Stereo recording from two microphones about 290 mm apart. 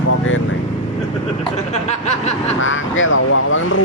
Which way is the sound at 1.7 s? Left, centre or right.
Left.